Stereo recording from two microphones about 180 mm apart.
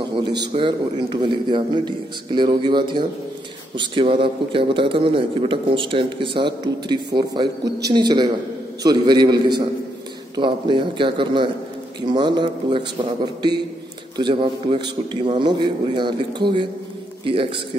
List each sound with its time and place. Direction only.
0.5 s a man's voice: 30° right (ahead or behind)